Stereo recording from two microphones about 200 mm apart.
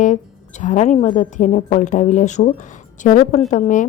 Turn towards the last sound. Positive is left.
turn(degrees=40)  # may be behind; listen again after turning